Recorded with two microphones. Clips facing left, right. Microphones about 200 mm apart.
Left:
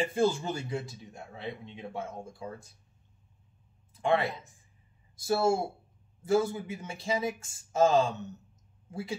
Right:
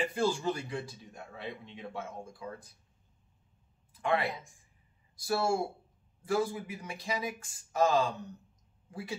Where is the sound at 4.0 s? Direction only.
25° left (ahead or behind).